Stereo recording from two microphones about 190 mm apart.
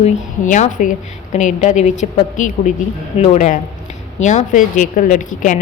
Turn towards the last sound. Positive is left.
turn(degrees=40)  # may be behind; listen again after turning